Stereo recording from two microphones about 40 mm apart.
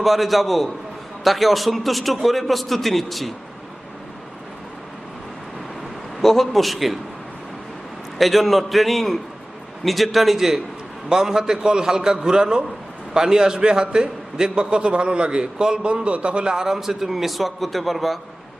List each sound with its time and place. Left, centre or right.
0.0 s a man's voice: centre
6.2 s a man's voice: centre
8.2 s a man's voice: centre